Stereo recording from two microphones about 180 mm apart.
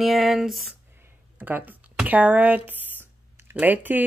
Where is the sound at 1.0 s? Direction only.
10° right (ahead or behind).